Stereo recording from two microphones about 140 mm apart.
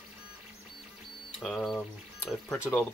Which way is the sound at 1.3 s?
5° left (ahead or behind).